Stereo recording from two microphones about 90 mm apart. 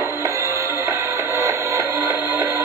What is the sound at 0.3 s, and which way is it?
Music, 35° right (ahead or behind).